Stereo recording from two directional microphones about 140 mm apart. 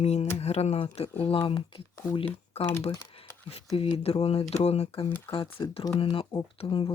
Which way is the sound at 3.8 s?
45° left (ahead or behind).